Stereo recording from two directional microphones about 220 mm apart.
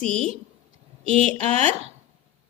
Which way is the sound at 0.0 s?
5° left (ahead or behind).